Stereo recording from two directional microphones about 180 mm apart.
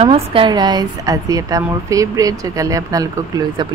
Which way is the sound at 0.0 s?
30° right (ahead or behind).